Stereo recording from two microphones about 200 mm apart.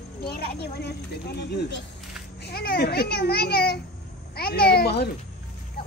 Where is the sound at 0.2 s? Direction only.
50° left (ahead or behind).